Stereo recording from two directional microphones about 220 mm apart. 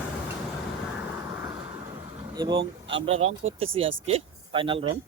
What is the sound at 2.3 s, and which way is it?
Speech, 20° right (ahead or behind).